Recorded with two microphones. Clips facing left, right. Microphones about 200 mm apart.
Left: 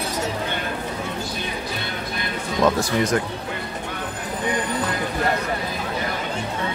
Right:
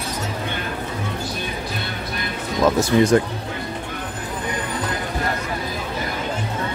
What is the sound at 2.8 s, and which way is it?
Speech, 30° right (ahead or behind).